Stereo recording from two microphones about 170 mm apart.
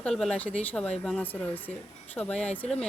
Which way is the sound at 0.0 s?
5° left (ahead or behind).